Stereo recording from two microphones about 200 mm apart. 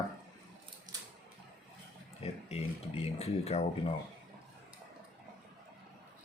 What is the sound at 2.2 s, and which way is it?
Speech, 30° left (ahead or behind).